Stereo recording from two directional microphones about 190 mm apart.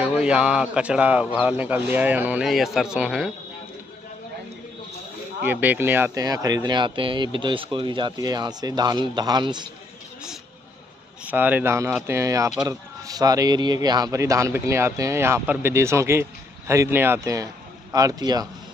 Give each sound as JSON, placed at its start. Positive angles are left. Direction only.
{"t": 0.1, "sound": "a man's voice", "side_deg": -5}
{"t": 5.4, "sound": "speech", "side_deg": -10}
{"t": 11.2, "sound": "speech", "side_deg": -10}